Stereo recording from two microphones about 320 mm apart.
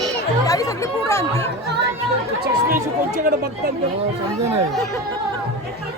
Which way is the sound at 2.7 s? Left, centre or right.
Right.